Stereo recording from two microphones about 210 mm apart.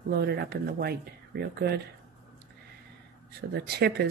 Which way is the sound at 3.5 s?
50° right (ahead or behind).